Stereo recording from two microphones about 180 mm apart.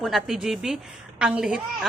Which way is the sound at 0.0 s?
Centre (ahead or behind).